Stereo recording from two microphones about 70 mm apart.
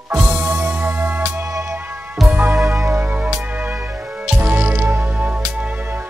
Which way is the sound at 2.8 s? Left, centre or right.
Right.